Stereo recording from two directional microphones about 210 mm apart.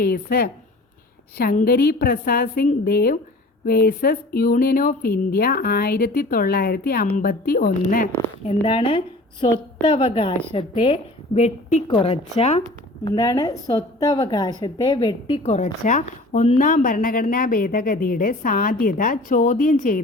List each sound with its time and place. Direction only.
0.0 s speech: 45° left (ahead or behind)
8.6 s a woman's voice: 25° left (ahead or behind)
13.1 s a woman's voice: 20° left (ahead or behind); by 20.0 s 40° left (ahead or behind)